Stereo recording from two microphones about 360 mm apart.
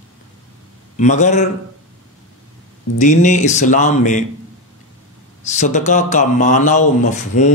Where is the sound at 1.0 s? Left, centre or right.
Centre.